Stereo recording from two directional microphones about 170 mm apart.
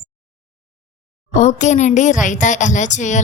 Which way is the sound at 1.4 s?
45° left (ahead or behind).